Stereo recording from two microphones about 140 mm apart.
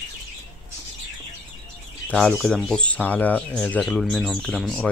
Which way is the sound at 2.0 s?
5° left (ahead or behind).